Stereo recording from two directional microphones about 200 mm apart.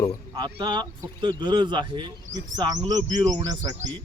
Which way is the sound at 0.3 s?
20° right (ahead or behind).